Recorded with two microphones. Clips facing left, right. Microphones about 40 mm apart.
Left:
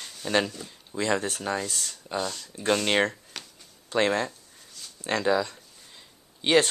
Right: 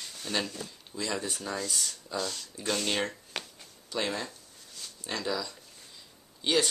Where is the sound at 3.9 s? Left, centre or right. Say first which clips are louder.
Left 8 dB; left.